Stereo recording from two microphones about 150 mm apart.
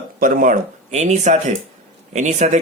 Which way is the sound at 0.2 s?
65° right (ahead or behind).